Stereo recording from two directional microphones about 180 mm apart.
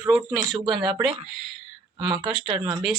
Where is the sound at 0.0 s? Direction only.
10° right (ahead or behind).